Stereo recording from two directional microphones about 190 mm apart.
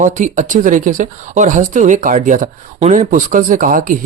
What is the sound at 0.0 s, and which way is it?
Speech, 40° right (ahead or behind).